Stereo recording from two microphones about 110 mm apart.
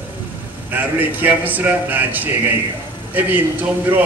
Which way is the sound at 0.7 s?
15° right (ahead or behind).